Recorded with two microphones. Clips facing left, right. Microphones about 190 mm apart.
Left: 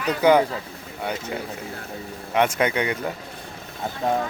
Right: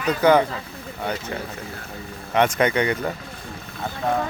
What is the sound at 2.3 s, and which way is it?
Speech, 5° left (ahead or behind).